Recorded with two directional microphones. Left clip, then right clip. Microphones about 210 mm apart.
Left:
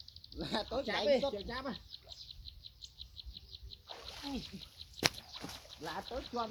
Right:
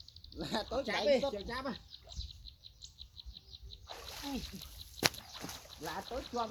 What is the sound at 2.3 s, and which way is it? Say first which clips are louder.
Bird: left 2 dB; 40° left (ahead or behind).